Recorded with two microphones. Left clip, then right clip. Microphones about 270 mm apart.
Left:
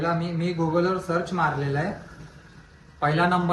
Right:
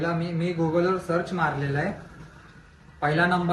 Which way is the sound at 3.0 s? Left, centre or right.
Centre.